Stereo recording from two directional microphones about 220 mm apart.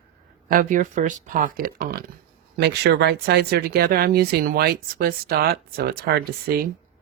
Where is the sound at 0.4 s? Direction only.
40° right (ahead or behind).